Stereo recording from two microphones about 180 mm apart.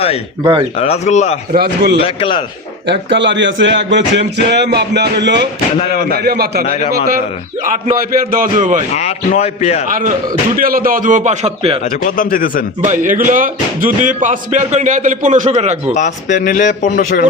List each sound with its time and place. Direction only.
0.8 s a man's voice: 35° left (ahead or behind)
1.5 s a man's voice: 65° right (ahead or behind)
2.0 s speech: 30° left (ahead or behind)
2.8 s speech: 75° right (ahead or behind)
6.1 s a man's voice: 60° right (ahead or behind)
7.6 s speech: 50° right (ahead or behind)
9.0 s a man's voice: 40° left (ahead or behind)
9.8 s speech: 50° right (ahead or behind)
11.9 s a man's voice: 45° left (ahead or behind)
12.8 s speech: 45° right (ahead or behind)
16.0 s a man's voice: 45° left (ahead or behind)